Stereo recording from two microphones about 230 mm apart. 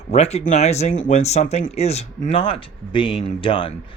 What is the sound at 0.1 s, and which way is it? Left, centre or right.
Speech, left.